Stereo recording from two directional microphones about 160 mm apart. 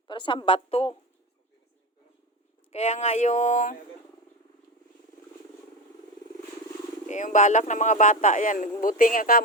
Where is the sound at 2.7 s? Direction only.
45° left (ahead or behind).